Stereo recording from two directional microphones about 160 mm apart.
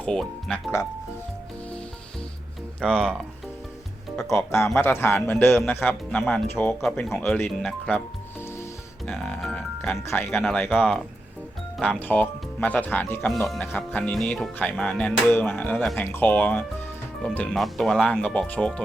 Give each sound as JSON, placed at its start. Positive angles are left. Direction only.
{"t": 0.0, "sound": "speech", "side_deg": 5}
{"t": 2.8, "sound": "speech", "side_deg": 5}
{"t": 4.3, "sound": "speech", "side_deg": 15}
{"t": 10.4, "sound": "speech", "side_deg": 5}
{"t": 13.3, "sound": "speech", "side_deg": 0}